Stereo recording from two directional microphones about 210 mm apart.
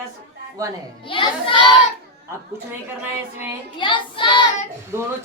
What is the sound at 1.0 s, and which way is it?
Speech, 25° left (ahead or behind).